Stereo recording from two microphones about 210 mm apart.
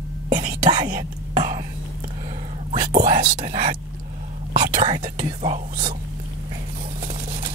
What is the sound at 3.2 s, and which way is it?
Speech, 25° right (ahead or behind).